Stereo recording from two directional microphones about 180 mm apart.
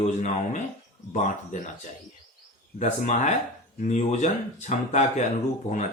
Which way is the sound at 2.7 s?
40° left (ahead or behind).